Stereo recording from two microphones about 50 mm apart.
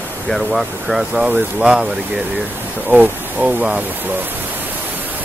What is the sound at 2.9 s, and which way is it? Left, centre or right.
Speech, right.